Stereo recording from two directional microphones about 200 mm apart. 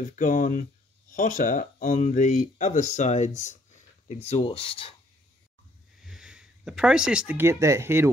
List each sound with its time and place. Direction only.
0.1 s speech: 40° left (ahead or behind)
6.0 s speech: 5° right (ahead or behind)